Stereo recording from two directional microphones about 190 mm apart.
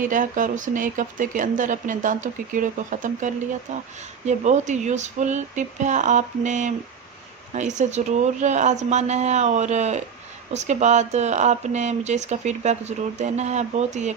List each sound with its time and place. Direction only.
0.0 s speech: 45° right (ahead or behind)